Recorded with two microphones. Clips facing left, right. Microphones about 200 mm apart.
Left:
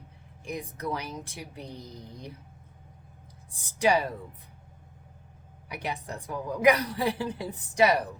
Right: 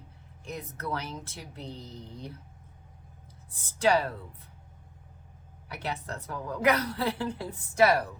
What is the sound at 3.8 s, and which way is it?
Speech, 15° left (ahead or behind).